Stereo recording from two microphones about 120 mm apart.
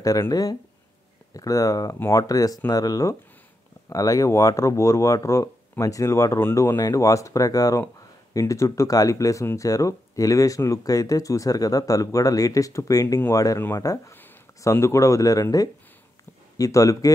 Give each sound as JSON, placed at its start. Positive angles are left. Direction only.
{"t": 0.0, "sound": "speech", "side_deg": 30}